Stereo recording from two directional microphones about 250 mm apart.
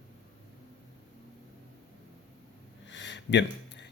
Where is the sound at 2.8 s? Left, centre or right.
Left.